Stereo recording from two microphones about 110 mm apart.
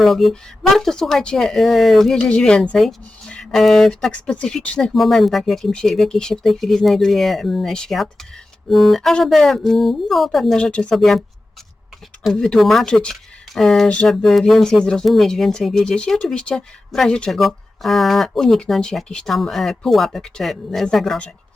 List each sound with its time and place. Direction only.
0.0 s speech: centre (ahead or behind)
12.2 s speech: 5° left (ahead or behind)